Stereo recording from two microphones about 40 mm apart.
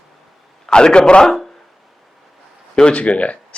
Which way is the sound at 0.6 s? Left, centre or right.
Left.